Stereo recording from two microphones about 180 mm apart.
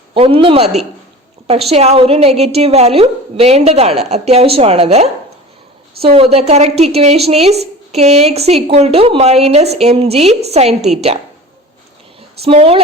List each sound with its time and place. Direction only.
0.1 s a woman's voice: 30° right (ahead or behind)
12.4 s a woman's voice: 35° right (ahead or behind)